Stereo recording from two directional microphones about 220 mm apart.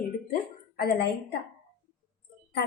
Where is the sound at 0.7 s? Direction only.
45° left (ahead or behind).